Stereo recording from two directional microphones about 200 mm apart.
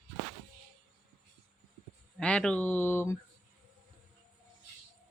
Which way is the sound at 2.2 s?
5° left (ahead or behind).